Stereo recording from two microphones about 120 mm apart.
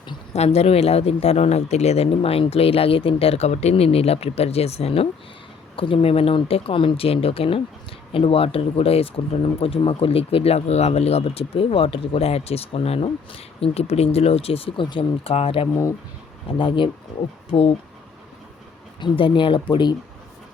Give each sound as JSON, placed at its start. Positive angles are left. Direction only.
{"t": 0.3, "sound": "speech", "side_deg": 60}
{"t": 15.7, "sound": "speech", "side_deg": 25}
{"t": 16.5, "sound": "speech", "side_deg": 45}
{"t": 17.5, "sound": "speech", "side_deg": 60}
{"t": 18.9, "sound": "speech", "side_deg": 45}